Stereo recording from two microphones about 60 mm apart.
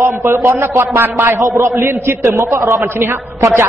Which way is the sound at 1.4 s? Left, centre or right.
Right.